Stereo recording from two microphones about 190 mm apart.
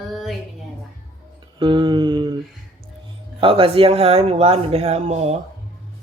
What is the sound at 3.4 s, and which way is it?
Speech, 30° right (ahead or behind).